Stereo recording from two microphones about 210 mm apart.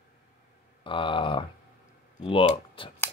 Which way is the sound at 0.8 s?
25° left (ahead or behind).